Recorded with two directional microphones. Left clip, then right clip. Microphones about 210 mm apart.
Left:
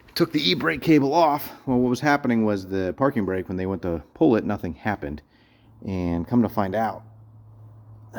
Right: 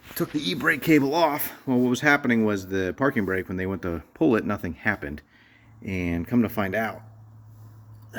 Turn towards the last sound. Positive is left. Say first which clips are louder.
# left 3 dB
turn(degrees=10)  # may be behind; listen again after turning